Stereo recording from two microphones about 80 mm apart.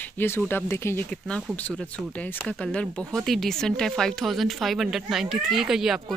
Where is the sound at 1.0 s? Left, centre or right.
Centre.